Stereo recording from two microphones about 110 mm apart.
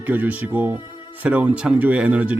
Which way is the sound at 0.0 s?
15° right (ahead or behind).